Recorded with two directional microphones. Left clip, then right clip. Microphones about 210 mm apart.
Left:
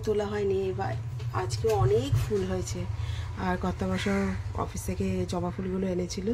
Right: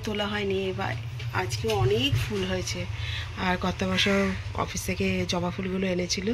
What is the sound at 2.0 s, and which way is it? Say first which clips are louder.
Speech: right 2 dB; 10° left (ahead or behind).